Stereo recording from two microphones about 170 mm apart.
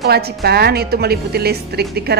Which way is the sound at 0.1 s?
70° right (ahead or behind).